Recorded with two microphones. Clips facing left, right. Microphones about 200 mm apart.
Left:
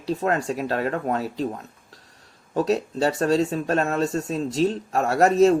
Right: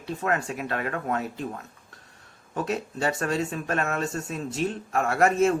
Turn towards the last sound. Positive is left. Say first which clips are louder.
# left 5 dB
turn(degrees=35)  # may be behind; listen again after turning